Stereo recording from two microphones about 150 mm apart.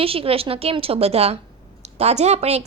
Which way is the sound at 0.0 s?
40° right (ahead or behind).